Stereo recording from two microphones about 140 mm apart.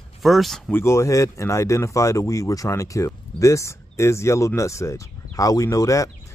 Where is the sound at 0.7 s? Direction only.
20° left (ahead or behind).